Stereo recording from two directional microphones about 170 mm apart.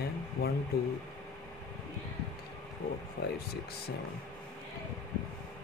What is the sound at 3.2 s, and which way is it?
Speech, 70° left (ahead or behind).